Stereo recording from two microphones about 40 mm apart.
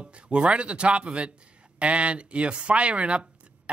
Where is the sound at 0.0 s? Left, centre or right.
Right.